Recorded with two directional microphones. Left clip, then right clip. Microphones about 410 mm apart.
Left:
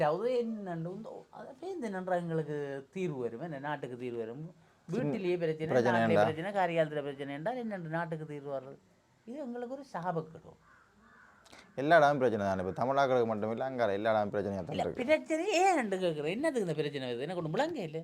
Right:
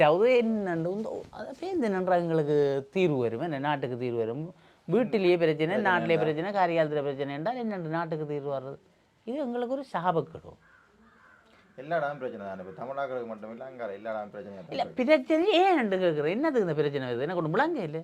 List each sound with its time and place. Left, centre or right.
0.0 s speech: right
11.8 s a man's voice: left
14.8 s speech: right